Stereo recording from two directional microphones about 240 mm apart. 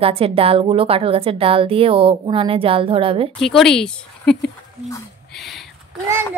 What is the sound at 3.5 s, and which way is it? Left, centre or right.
Speech, centre.